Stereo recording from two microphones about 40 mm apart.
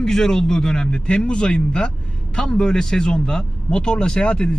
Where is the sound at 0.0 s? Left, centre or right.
Centre.